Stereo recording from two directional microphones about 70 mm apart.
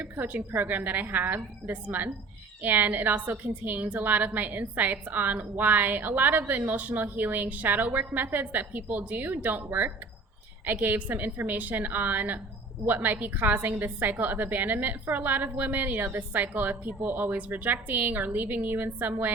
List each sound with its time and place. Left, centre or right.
0.0 s a woman's voice: right